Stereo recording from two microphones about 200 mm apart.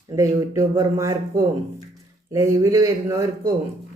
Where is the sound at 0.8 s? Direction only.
15° right (ahead or behind).